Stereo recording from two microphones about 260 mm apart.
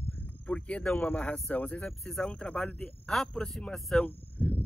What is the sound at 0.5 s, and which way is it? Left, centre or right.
Speech, centre.